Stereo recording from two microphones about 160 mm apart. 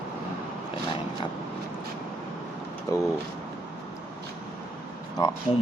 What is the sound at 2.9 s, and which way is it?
Vehicle, 20° left (ahead or behind).